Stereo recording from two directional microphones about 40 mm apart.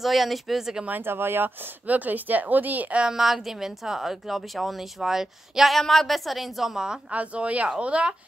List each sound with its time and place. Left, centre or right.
0.0 s speech: centre
1.0 s speech: right
1.9 s speech: right
3.1 s a woman's voice: centre
5.7 s speech: centre
7.1 s speech: right